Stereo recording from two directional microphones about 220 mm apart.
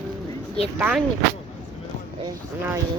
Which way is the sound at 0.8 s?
5° right (ahead or behind).